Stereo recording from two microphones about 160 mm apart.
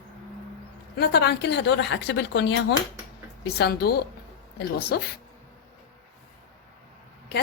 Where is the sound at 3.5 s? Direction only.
85° left.